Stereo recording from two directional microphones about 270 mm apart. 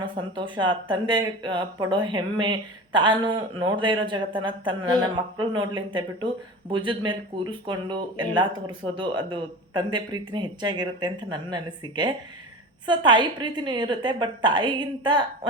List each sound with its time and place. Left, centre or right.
0.0 s speech: centre